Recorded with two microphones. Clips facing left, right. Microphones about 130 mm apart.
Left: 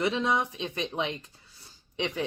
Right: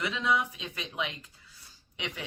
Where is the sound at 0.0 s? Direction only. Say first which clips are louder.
Left 3 dB; 30° left (ahead or behind).